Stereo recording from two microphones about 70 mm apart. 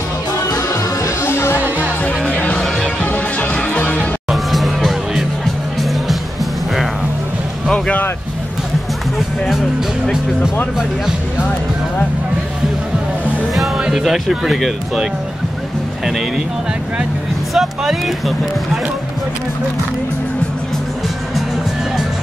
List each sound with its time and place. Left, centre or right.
0.4 s music: left
1.2 s music: left
1.8 s music: left
4.3 s music: centre
13.9 s speech: centre
17.6 s speech: centre